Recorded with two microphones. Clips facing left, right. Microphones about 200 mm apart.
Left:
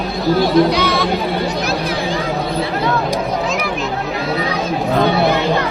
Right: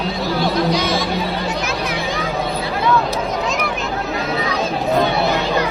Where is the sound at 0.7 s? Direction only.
60° left (ahead or behind).